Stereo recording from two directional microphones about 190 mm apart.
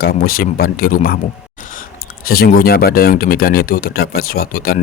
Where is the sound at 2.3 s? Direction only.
50° left (ahead or behind).